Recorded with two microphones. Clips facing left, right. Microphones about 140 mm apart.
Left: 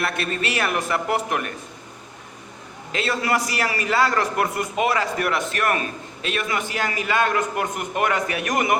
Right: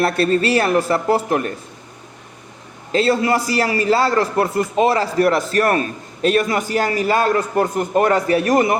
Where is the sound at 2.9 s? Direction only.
30° right (ahead or behind).